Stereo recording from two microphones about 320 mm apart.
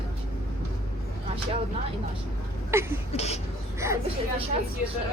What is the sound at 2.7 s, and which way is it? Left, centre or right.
Speech, centre.